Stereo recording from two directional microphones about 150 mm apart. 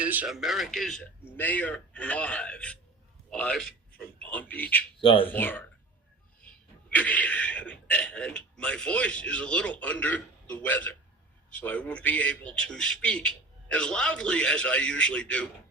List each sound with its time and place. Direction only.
0.0 s a man's voice: 10° right (ahead or behind); by 4.9 s 10° left (ahead or behind)
4.9 s speech: 35° left (ahead or behind)
5.2 s a man's voice: 15° left (ahead or behind)
6.9 s a man's voice: 10° left (ahead or behind)